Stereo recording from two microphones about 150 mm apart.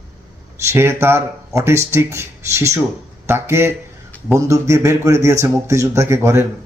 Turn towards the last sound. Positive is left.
turn(degrees=-20)  # may be behind; listen again after turning